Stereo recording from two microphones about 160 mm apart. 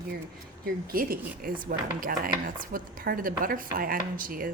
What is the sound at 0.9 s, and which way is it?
Speech, 65° right (ahead or behind).